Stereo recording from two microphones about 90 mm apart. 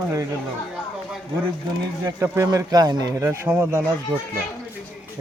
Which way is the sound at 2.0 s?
35° right (ahead or behind).